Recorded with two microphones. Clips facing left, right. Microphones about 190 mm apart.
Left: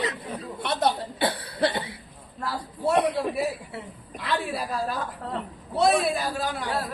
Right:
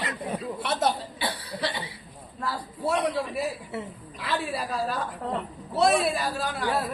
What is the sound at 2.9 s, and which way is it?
Speech, 60° left (ahead or behind).